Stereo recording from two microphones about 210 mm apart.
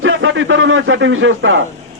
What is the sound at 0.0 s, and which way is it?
A man's voice, 65° right (ahead or behind).